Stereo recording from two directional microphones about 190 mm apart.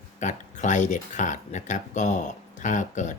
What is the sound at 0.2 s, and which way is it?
Speech, 40° left (ahead or behind).